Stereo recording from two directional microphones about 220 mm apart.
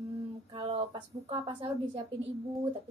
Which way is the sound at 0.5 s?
25° right (ahead or behind).